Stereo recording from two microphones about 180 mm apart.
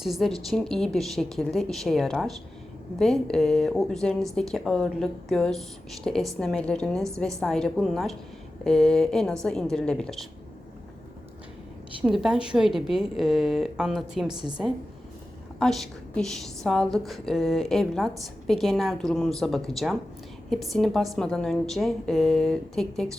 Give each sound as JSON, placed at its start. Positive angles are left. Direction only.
{"t": 0.0, "sound": "a woman's voice", "side_deg": 0}
{"t": 12.0, "sound": "a woman's voice", "side_deg": -5}
{"t": 14.3, "sound": "a woman's voice", "side_deg": -25}
{"t": 15.5, "sound": "a woman's voice", "side_deg": 0}